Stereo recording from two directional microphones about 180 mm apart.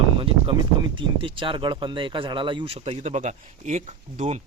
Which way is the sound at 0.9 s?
30° right (ahead or behind).